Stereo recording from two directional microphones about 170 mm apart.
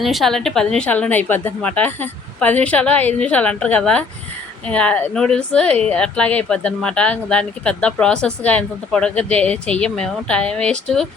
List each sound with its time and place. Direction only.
0.0 s speech: centre (ahead or behind)